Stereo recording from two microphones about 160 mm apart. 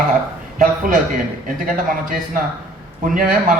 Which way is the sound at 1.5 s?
60° right (ahead or behind).